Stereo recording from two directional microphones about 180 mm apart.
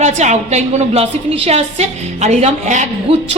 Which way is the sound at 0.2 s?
40° right (ahead or behind).